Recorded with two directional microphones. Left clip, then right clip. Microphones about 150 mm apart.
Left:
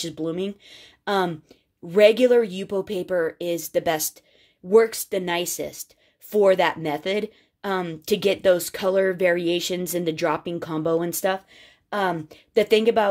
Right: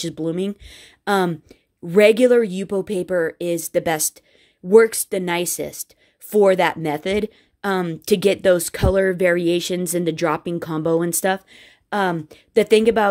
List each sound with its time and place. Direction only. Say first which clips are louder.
0.0 s speech: right 3 dB; 40° right (ahead or behind)